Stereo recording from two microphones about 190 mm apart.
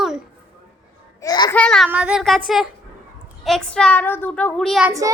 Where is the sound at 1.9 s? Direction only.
5° right (ahead or behind).